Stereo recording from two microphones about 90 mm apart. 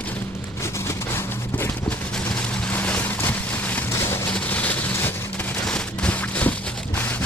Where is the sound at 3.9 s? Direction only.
30° left (ahead or behind).